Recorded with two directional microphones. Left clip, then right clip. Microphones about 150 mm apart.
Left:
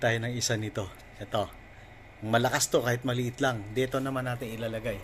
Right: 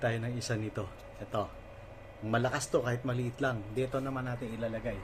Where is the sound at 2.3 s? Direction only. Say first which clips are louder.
Left 5 dB; 25° left (ahead or behind).